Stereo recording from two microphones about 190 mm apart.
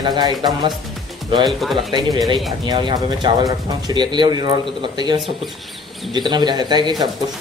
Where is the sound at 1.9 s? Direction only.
20° right (ahead or behind).